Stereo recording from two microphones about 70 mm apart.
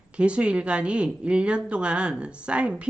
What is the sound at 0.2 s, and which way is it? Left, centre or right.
A woman's voice, centre.